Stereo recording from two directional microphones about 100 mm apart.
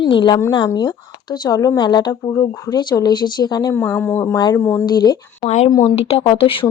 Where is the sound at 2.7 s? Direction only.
45° left (ahead or behind).